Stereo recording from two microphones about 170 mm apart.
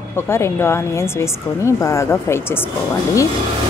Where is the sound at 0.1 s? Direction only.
15° left (ahead or behind).